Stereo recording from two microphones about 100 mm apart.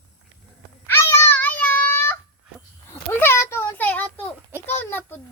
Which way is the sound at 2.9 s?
20° left (ahead or behind).